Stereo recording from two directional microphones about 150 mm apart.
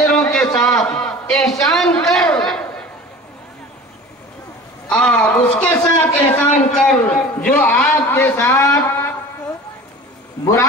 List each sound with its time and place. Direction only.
0.1 s a sound: 5° left (ahead or behind)
4.8 s a man's voice: 5° left (ahead or behind)
10.4 s a man's voice: 20° left (ahead or behind)